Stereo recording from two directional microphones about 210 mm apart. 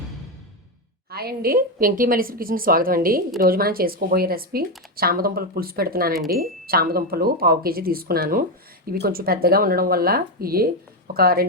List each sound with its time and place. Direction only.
1.1 s a woman's voice: 50° right (ahead or behind)